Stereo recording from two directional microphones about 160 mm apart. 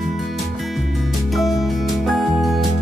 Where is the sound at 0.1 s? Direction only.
Centre (ahead or behind).